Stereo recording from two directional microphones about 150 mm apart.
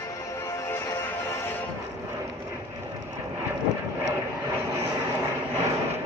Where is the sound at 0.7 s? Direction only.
15° left (ahead or behind).